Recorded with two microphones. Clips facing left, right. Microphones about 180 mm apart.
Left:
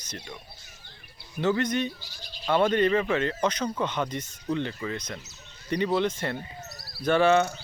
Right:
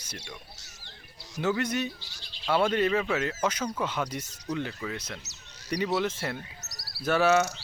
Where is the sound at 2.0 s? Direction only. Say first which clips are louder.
Left 5 dB; 45° left (ahead or behind).